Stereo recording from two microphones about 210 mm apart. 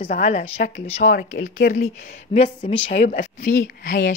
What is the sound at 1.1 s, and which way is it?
Speech, 50° left (ahead or behind).